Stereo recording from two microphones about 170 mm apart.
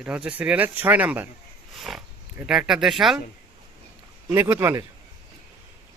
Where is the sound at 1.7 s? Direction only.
Centre (ahead or behind).